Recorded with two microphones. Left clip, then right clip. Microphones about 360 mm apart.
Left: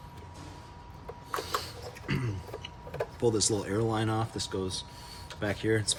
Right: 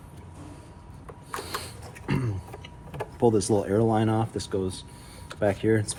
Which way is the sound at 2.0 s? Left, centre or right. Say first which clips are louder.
Right 5 dB; centre.